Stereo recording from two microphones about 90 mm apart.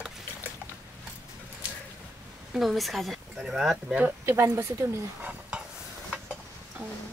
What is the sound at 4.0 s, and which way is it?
Speech, 25° right (ahead or behind).